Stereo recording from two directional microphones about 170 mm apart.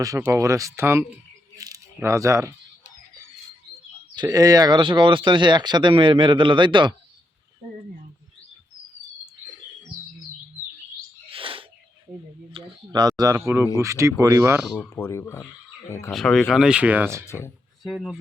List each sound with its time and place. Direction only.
0.0 s speech: 20° right (ahead or behind)
1.5 s a sound: 20° right (ahead or behind)
4.1 s speech: 25° right (ahead or behind)
11.3 s bird: 30° right (ahead or behind)
12.5 s speech: 25° right (ahead or behind)
14.8 s speech: 15° left (ahead or behind)
16.1 s speech: centre (ahead or behind); by 17.2 s 15° right (ahead or behind)
17.2 s speech: 15° left (ahead or behind)
17.8 s speech: centre (ahead or behind)